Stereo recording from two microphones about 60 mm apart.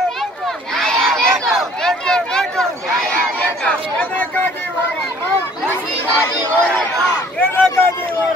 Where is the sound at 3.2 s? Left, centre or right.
Centre.